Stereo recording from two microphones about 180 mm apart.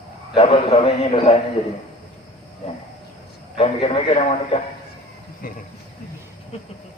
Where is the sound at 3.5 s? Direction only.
30° left (ahead or behind).